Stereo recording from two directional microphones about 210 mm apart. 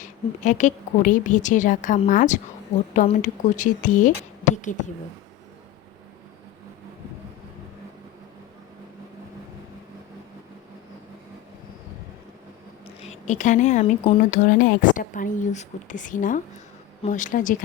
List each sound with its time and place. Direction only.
0.0 s a woman's voice: 35° left (ahead or behind)
13.0 s a woman's voice: 35° left (ahead or behind)